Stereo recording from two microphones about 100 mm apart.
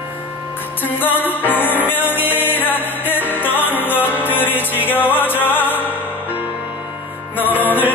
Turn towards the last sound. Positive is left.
turn(degrees=20)  # may be behind; listen again after turning